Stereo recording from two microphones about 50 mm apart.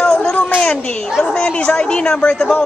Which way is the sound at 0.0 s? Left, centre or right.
Centre.